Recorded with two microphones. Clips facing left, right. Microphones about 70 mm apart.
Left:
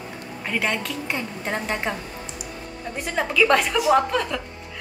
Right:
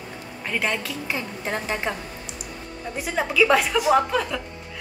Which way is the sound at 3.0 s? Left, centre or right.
Centre.